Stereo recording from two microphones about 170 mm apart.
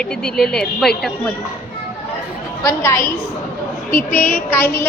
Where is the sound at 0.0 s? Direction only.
5° left (ahead or behind).